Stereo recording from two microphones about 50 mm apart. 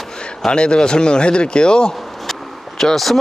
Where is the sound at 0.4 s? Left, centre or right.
Centre.